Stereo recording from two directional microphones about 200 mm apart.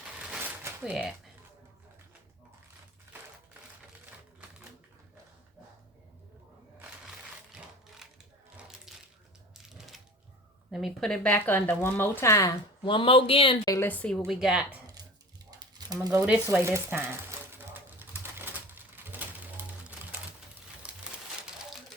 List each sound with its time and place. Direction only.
0.2 s a sound: 5° right (ahead or behind)
7.0 s sewing machine: centre (ahead or behind)
8.9 s coin: centre (ahead or behind)
9.7 s typewriter: centre (ahead or behind)
10.7 s speech: centre (ahead or behind); by 13.7 s 25° left (ahead or behind)
13.7 s speech: 10° left (ahead or behind)
15.4 s a sound: 20° right (ahead or behind)
16.2 s speech: 5° right (ahead or behind)
17.7 s typewriter: 10° right (ahead or behind)